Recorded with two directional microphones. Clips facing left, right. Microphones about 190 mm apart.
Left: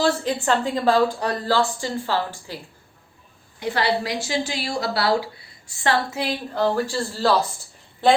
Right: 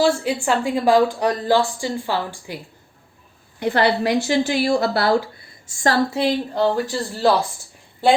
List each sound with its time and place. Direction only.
0.0 s speech: 10° right (ahead or behind)
3.6 s a woman's voice: 55° right (ahead or behind); by 6.2 s 35° right (ahead or behind)
6.5 s speech: 20° right (ahead or behind)